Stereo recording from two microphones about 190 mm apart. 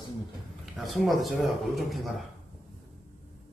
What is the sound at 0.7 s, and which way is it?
Speech, centre (ahead or behind).